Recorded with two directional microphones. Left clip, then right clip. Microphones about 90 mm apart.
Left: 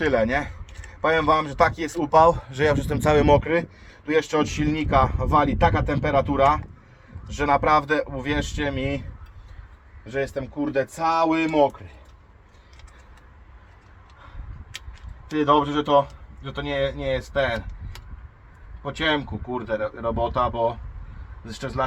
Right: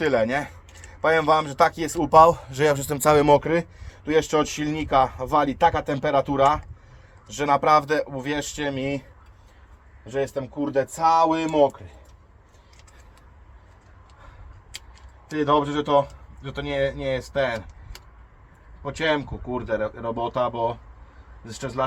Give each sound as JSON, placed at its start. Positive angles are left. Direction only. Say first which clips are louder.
{"t": 0.0, "sound": "a man's voice", "louder": "even", "side_deg": -15}
{"t": 15.4, "sound": "speech", "louder": "left 2 dB", "side_deg": -30}
{"t": 18.8, "sound": "speech", "louder": "even", "side_deg": -35}